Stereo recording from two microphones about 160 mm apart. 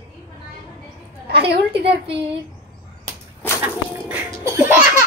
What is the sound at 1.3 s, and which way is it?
Speech, 90° right.